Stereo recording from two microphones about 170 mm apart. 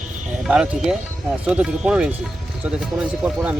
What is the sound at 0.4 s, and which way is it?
Speech, 5° right (ahead or behind).